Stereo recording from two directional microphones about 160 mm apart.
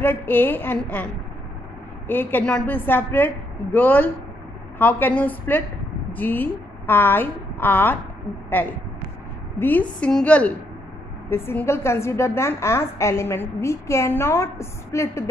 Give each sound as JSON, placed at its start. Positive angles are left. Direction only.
{"t": 0.0, "sound": "a woman's voice", "side_deg": 15}
{"t": 2.0, "sound": "a woman's voice", "side_deg": 10}